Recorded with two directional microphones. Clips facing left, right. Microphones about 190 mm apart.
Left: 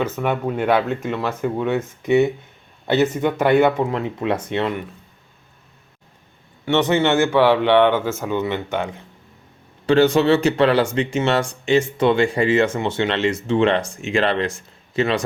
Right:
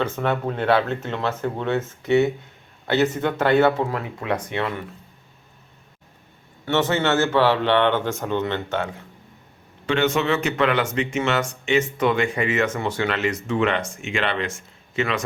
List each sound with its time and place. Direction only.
0.0 s speech: 10° left (ahead or behind)
6.7 s speech: 15° left (ahead or behind)
9.8 s speech: 35° left (ahead or behind)